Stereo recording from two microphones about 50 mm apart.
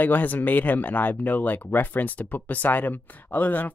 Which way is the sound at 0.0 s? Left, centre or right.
Left.